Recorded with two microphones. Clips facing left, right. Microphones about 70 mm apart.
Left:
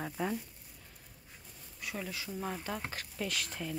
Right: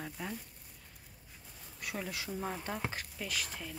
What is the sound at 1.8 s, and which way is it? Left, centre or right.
Speech, right.